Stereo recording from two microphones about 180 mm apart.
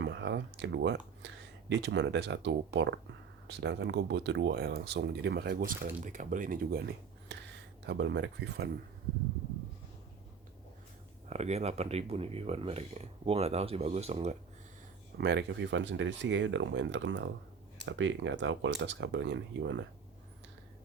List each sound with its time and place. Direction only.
0.0 s speech: 75° right (ahead or behind); by 6.8 s 55° right (ahead or behind)
7.3 s speech: 75° right (ahead or behind)
7.9 s speech: 85° right; by 8.7 s 65° right (ahead or behind)
11.3 s speech: 40° right (ahead or behind)
15.2 s speech: 70° right (ahead or behind); by 19.8 s 90° right